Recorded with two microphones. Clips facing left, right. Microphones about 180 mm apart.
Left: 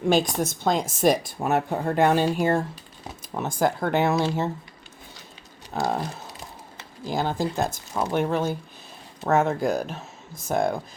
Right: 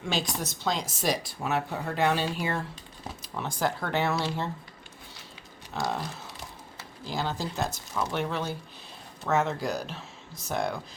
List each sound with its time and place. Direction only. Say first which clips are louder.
0.1 s speech: left 9 dB; 50° left (ahead or behind)
5.8 s speech: left 5 dB; 45° left (ahead or behind)